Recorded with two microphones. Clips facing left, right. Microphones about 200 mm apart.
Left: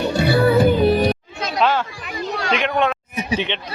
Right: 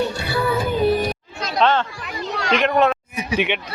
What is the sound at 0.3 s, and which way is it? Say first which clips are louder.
Music: left 11 dB; 65° left (ahead or behind).